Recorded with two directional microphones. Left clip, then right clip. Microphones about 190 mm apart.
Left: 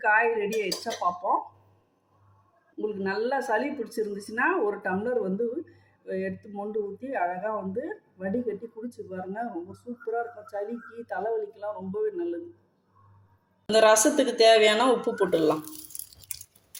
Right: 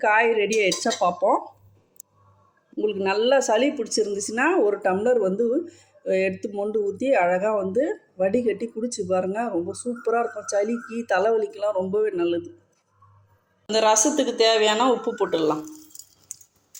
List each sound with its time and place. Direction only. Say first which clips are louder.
0.0 s speech: right 4 dB; 45° right (ahead or behind)
2.7 s speech: right 7 dB; 40° right (ahead or behind)
13.7 s speech: even; 5° right (ahead or behind)